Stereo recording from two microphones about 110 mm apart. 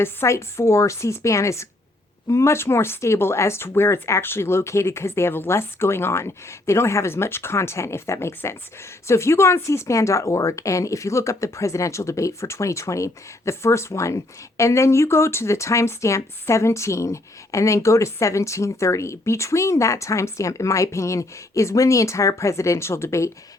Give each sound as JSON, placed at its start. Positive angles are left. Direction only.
{"t": 0.0, "sound": "speech", "side_deg": 25}